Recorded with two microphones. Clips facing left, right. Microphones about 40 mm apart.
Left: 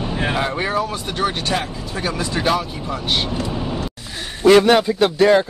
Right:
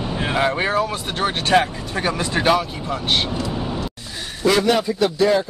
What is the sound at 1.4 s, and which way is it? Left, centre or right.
Speech, right.